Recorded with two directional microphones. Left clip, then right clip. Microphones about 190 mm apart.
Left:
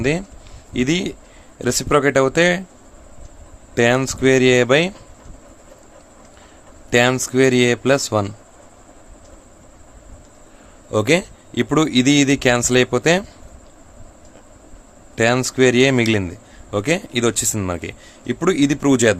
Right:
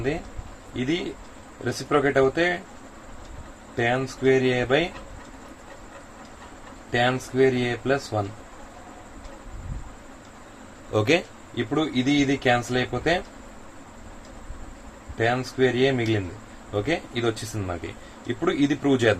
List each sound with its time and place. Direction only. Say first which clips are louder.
1.6 s speech: left 6 dB; 70° left (ahead or behind)
3.8 s speech: left 8 dB; 70° left (ahead or behind)
6.9 s speech: left 7 dB; 70° left (ahead or behind)
10.9 s speech: left 5 dB; 50° left (ahead or behind)
15.2 s speech: left 7 dB; 70° left (ahead or behind)